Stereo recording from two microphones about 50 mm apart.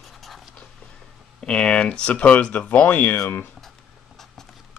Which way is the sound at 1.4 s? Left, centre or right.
Left.